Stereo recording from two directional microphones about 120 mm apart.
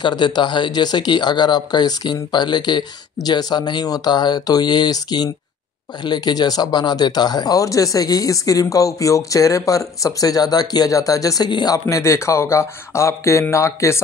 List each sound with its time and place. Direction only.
0.0 s speech: 40° left (ahead or behind)